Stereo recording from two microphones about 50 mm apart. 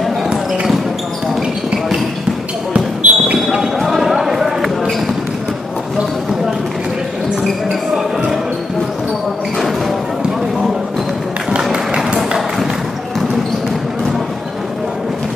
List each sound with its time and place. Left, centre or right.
2.7 s basketball bounce: right
3.5 s basketball bounce: centre
11.7 s music: centre